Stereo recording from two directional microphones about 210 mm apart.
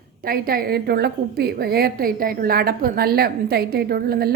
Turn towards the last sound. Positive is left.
turn(degrees=-45)  # may be behind; listen again after turning